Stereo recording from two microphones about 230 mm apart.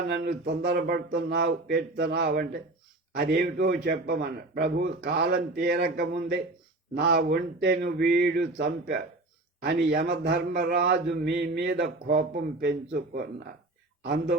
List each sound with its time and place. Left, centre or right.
0.1 s speech: right